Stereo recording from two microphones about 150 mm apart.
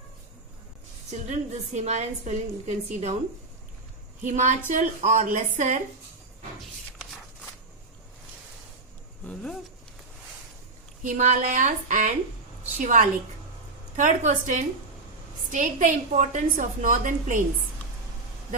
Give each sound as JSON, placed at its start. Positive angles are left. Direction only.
{"t": 1.3, "sound": "a woman's voice", "side_deg": -50}
{"t": 4.2, "sound": "a woman's voice", "side_deg": -55}
{"t": 9.2, "sound": "speech", "side_deg": 5}
{"t": 11.0, "sound": "a woman's voice", "side_deg": -60}